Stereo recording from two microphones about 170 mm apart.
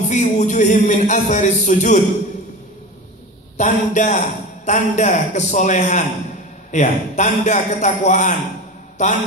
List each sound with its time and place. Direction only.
0.1 s a man's voice: 45° left (ahead or behind)
3.5 s a man's voice: 45° left (ahead or behind)